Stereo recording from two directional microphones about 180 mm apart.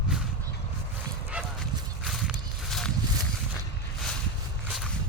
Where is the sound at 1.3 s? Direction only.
5° right (ahead or behind).